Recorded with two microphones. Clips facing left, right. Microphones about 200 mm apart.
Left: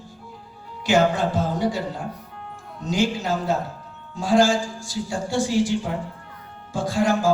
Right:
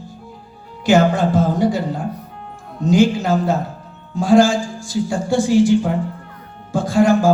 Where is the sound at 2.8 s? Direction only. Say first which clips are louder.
Right 8 dB; 50° right (ahead or behind).